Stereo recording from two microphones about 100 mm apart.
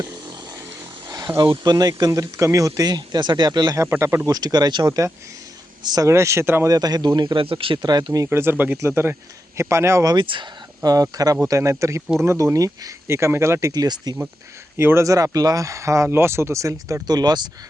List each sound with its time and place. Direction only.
1.6 s speech: 40° right (ahead or behind)
3.8 s speech: 25° right (ahead or behind)
4.3 s speech: 40° right (ahead or behind)
4.9 s speech: 30° right (ahead or behind)
5.8 s speech: 40° right (ahead or behind)
6.1 s speech: 30° right (ahead or behind)
6.7 s speech: 40° right (ahead or behind)
7.4 s speech: 60° right (ahead or behind); by 8.3 s 40° right (ahead or behind)
8.3 s speech: 25° right (ahead or behind)
10.2 s speech: 55° right (ahead or behind)
10.8 s speech: 40° right (ahead or behind)
14.8 s speech: 25° right (ahead or behind); by 17.5 s 45° right (ahead or behind)